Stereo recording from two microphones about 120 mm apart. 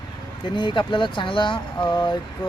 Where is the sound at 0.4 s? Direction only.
45° left (ahead or behind).